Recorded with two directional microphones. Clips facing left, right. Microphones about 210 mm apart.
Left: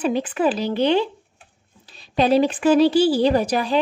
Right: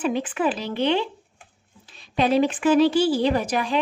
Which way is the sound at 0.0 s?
35° left (ahead or behind).